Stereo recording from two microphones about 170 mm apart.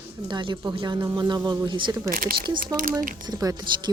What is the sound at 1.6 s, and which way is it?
Speech, 25° right (ahead or behind).